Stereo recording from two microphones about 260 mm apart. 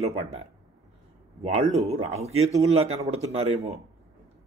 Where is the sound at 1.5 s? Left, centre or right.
Right.